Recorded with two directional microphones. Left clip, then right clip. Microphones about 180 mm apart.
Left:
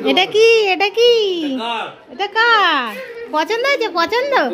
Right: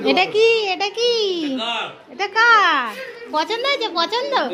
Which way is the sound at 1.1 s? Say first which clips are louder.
Left 4 dB; 15° left (ahead or behind).